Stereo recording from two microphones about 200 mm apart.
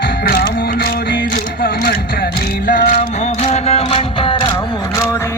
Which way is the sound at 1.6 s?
50° left (ahead or behind).